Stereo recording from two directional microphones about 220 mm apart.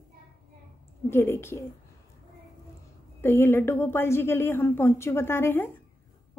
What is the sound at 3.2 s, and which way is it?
Speech, 10° left (ahead or behind).